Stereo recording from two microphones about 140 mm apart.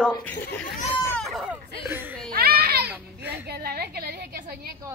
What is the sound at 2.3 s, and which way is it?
Children playing, 90° right.